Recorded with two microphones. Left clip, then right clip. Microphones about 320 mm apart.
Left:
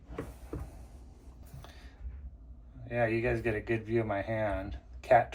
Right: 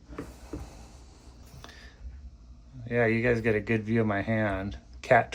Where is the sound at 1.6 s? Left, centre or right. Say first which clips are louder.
Right 6 dB; right.